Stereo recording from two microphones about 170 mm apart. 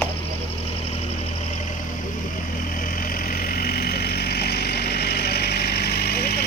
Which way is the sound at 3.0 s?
55° left (ahead or behind).